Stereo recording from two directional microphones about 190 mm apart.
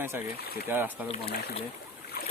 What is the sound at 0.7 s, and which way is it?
Speech, 10° right (ahead or behind).